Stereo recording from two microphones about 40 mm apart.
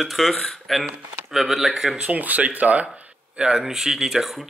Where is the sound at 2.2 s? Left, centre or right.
Right.